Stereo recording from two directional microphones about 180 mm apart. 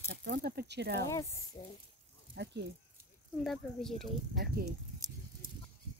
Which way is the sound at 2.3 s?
75° right (ahead or behind).